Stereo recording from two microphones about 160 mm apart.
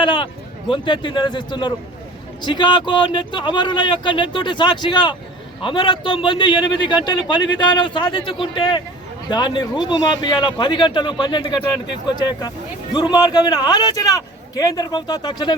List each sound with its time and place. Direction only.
0.0 s a man's voice: 30° left (ahead or behind)